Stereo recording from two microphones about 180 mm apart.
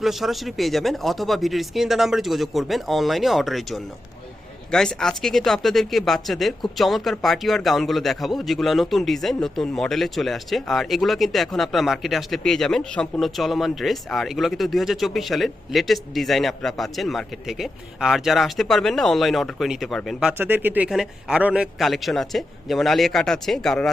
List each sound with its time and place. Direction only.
0.0 s speech: centre (ahead or behind)